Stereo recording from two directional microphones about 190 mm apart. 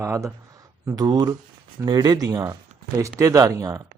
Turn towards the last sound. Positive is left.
turn(degrees=-20)  # may be behind; listen again after turning